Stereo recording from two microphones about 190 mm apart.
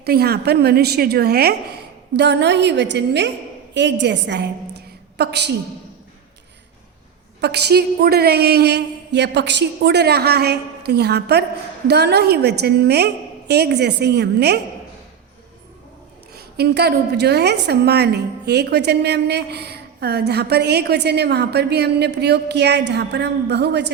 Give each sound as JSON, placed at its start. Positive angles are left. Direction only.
{"t": 0.0, "sound": "a woman's voice", "side_deg": -55}
{"t": 7.4, "sound": "a woman's voice", "side_deg": -60}
{"t": 16.6, "sound": "a woman's voice", "side_deg": -60}